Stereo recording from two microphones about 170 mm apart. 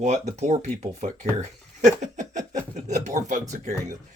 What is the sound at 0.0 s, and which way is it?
Speech, 40° right (ahead or behind).